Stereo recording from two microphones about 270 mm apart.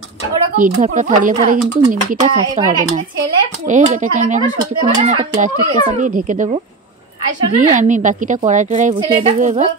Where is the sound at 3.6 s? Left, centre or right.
Right.